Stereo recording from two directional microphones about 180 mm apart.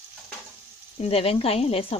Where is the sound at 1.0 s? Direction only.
30° left (ahead or behind).